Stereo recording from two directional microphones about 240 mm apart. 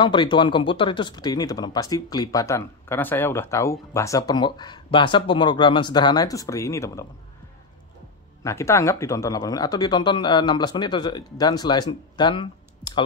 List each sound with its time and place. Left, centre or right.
0.0 s speech: centre
8.5 s speech: centre